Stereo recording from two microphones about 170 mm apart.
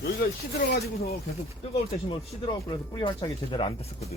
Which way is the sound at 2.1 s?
30° left (ahead or behind).